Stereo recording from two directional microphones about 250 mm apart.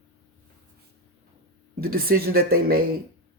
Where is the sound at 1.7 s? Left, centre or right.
Right.